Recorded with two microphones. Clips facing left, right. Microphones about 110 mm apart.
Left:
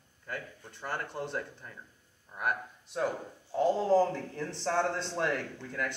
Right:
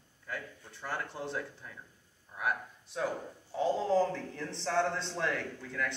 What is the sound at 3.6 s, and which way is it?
Speech, 5° left (ahead or behind).